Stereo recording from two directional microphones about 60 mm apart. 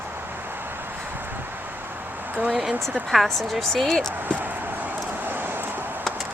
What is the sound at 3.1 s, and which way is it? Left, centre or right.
A woman's voice, centre.